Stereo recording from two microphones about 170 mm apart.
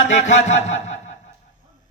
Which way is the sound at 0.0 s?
90° left.